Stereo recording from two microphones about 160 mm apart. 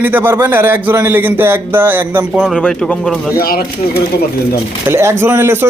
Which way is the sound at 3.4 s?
70° left (ahead or behind).